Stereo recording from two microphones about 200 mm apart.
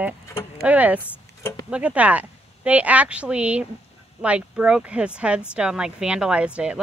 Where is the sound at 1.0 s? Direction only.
15° left (ahead or behind).